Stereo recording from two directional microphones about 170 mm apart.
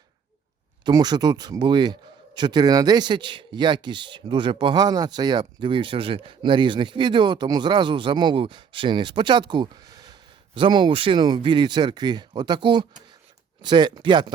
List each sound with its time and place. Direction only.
0.9 s a man's voice: 25° right (ahead or behind)